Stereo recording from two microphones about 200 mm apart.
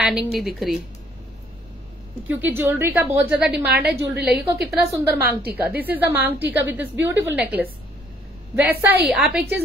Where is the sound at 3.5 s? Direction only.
55° right (ahead or behind).